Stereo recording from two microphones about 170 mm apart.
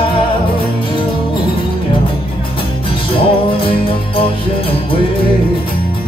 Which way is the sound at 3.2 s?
30° left (ahead or behind).